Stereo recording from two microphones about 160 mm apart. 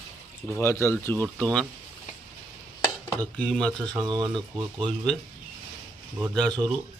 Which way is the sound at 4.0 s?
30° right (ahead or behind).